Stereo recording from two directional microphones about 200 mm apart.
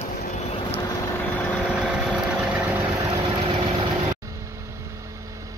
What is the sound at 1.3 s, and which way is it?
Vehicle, 5° left (ahead or behind).